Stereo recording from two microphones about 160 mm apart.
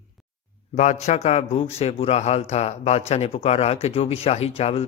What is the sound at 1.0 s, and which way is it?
Speech, 45° left (ahead or behind).